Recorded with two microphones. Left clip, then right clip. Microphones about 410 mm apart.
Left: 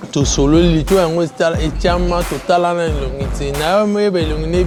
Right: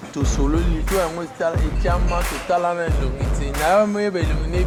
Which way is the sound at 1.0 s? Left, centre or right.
Left.